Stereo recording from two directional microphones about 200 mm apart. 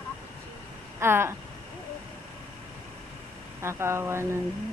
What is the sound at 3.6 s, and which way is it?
Speech, 15° right (ahead or behind).